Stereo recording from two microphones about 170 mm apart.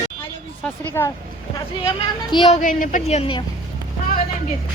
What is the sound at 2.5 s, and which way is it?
Speech, 50° left (ahead or behind).